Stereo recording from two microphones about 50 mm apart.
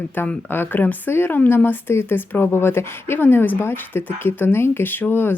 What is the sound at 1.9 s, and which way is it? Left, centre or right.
Speech, left.